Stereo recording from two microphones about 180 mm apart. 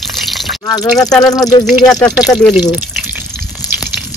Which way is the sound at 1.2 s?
20° left (ahead or behind).